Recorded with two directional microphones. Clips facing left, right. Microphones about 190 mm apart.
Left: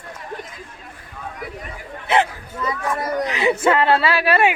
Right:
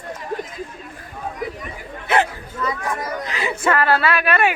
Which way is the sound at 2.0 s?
20° left (ahead or behind).